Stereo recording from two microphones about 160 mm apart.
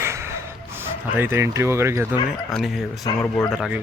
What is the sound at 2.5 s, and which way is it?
Speech, centre (ahead or behind).